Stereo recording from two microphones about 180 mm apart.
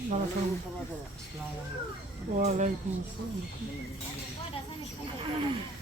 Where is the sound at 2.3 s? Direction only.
40° right (ahead or behind).